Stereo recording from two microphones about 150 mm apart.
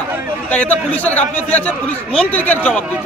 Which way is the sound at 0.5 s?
10° left (ahead or behind).